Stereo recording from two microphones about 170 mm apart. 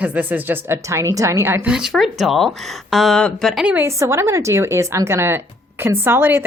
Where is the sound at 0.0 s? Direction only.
10° right (ahead or behind).